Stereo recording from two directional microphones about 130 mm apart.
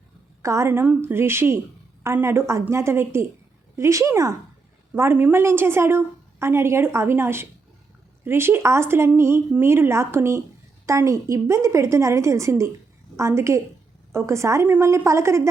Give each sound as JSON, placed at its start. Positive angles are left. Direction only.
{"t": 0.4, "sound": "a woman's voice", "side_deg": -25}